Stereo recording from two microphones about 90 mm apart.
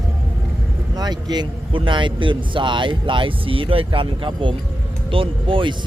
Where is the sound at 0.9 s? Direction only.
50° right (ahead or behind).